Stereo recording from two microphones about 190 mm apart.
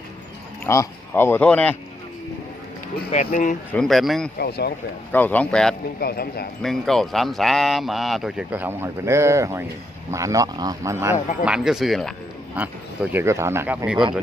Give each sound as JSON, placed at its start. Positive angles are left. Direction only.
{"t": 0.6, "sound": "speech", "side_deg": 15}
{"t": 3.1, "sound": "speech", "side_deg": 40}
{"t": 3.7, "sound": "speech", "side_deg": 5}
{"t": 4.4, "sound": "speech", "side_deg": 55}
{"t": 5.1, "sound": "speech", "side_deg": 10}
{"t": 6.0, "sound": "speech", "side_deg": 55}
{"t": 6.6, "sound": "speech", "side_deg": 0}
{"t": 11.4, "sound": "speech", "side_deg": -5}